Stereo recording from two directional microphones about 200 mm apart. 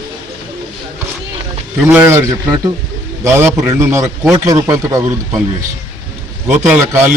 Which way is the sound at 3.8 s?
10° right (ahead or behind).